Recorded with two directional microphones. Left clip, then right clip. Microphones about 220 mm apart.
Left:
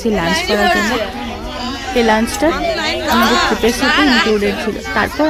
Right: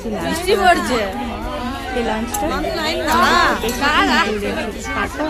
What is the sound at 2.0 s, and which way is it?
Speech, 30° left (ahead or behind).